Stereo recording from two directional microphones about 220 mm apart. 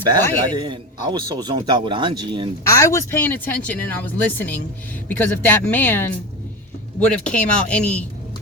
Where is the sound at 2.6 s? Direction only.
15° left (ahead or behind).